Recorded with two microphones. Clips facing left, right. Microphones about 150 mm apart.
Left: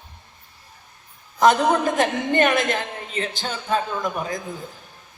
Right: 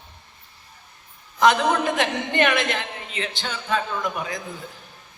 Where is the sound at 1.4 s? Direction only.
45° left (ahead or behind).